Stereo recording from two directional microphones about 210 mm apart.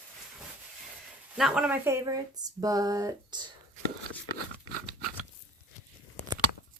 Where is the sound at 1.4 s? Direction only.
5° right (ahead or behind).